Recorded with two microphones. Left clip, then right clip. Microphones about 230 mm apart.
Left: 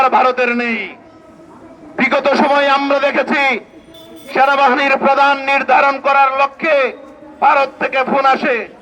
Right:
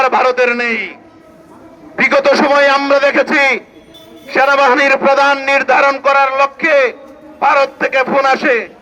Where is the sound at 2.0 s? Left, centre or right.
Right.